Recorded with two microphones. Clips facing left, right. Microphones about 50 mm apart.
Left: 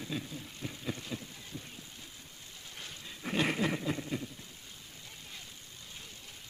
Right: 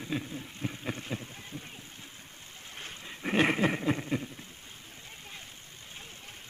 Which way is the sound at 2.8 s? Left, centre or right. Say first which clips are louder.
Right 4 dB; right.